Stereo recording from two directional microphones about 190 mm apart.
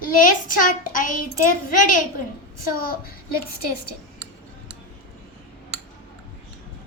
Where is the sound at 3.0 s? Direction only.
50° left (ahead or behind).